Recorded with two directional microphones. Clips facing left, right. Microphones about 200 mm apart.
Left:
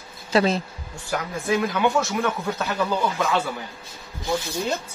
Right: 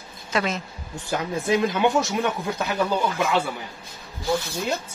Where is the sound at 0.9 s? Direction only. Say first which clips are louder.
Right 2 dB; 20° right (ahead or behind).